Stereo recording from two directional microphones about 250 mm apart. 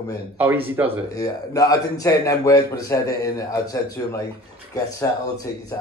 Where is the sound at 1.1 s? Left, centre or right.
Centre.